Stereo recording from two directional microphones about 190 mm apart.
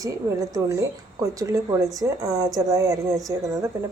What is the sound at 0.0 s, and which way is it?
A woman's voice, 20° right (ahead or behind).